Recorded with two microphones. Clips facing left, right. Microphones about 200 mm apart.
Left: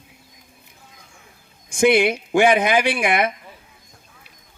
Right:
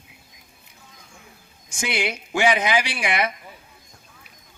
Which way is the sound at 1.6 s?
55° left (ahead or behind).